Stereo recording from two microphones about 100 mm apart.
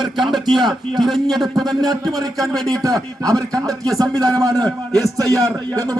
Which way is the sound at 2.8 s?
35° right (ahead or behind).